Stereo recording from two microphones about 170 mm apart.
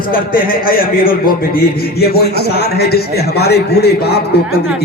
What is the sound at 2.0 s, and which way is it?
A man's voice, 70° left (ahead or behind).